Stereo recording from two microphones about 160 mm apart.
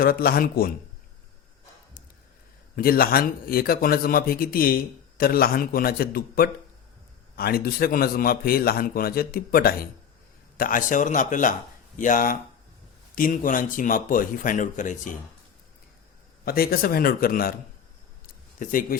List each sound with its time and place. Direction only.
0.0 s a man's voice: 65° left (ahead or behind)
2.7 s a man's voice: 65° left (ahead or behind)
10.6 s speech: 55° left (ahead or behind)
16.4 s a man's voice: 70° left (ahead or behind)
18.6 s speech: 60° left (ahead or behind)